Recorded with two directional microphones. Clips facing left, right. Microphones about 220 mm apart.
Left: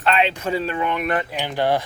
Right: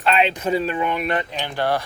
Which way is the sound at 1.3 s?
15° left (ahead or behind).